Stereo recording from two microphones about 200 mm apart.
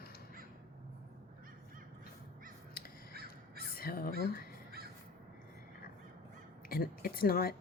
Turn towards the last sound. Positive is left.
turn(degrees=50)  # may be behind; listen again after turning